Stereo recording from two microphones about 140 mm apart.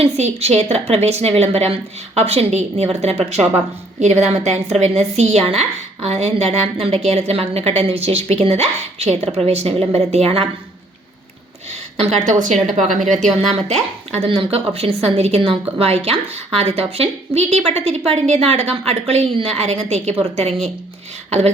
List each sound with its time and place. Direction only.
0.0 s a woman's voice: 50° right (ahead or behind)
11.9 s a woman's voice: 55° right (ahead or behind)
12.8 s speech: centre (ahead or behind)
13.7 s a woman's voice: 50° right (ahead or behind)
14.3 s a woman's voice: 40° right (ahead or behind)